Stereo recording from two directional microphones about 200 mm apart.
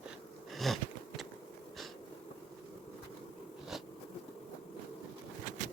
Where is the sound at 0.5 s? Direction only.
Centre (ahead or behind).